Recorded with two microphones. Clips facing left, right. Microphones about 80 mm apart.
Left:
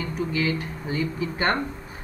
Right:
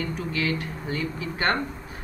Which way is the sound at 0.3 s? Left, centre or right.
Centre.